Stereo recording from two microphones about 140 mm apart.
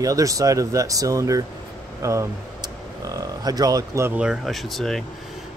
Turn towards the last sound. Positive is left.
turn(degrees=0)  # may be behind; listen again after turning